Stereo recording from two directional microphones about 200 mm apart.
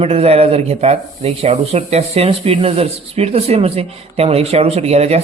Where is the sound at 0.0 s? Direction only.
30° right (ahead or behind).